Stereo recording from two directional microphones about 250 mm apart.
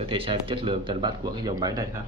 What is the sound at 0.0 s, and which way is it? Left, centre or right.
Speech, right.